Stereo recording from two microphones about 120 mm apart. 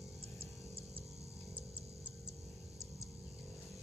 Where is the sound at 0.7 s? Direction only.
50° right (ahead or behind).